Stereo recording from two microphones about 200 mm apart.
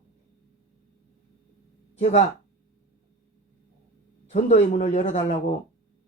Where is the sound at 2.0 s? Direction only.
35° left (ahead or behind).